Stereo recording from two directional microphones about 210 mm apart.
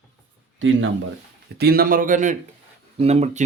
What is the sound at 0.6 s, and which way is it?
Speech, 65° right (ahead or behind).